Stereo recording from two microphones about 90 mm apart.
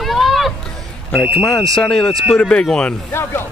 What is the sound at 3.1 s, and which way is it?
Speech, 25° left (ahead or behind).